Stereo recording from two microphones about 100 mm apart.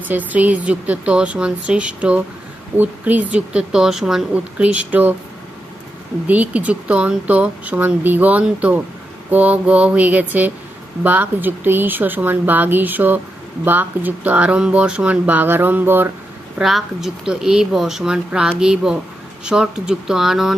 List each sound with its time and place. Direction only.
0.0 s speech: 15° right (ahead or behind)
6.2 s speech: 15° right (ahead or behind)
16.6 s speech: centre (ahead or behind)